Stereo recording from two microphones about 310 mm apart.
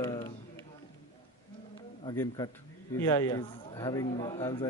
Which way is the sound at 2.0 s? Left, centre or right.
Centre.